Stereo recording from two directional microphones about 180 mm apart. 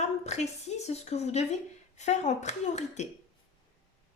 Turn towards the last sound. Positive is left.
turn(degrees=40)  # may be behind; listen again after turning